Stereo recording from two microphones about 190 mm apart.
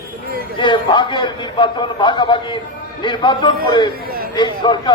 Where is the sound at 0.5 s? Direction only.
25° left (ahead or behind).